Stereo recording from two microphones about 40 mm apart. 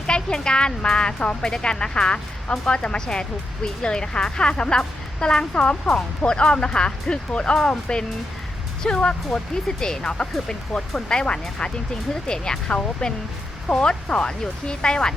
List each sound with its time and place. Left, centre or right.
0.1 s speech: left